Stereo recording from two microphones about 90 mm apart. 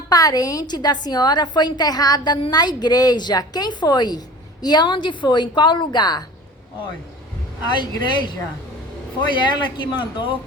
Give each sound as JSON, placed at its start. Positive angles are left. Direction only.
{"t": 0.1, "sound": "a woman's voice", "side_deg": 45}
{"t": 7.8, "sound": "a woman's voice", "side_deg": 60}